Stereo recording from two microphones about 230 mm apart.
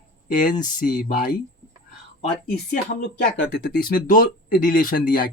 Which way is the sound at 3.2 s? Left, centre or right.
Left.